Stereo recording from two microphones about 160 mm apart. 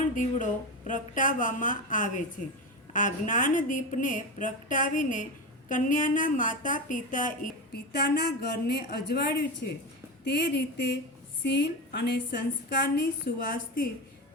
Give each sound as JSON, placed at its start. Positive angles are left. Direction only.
{"t": 0.2, "sound": "a woman's voice", "side_deg": 55}
{"t": 7.7, "sound": "a woman's voice", "side_deg": 90}
{"t": 13.0, "sound": "a woman's voice", "side_deg": 70}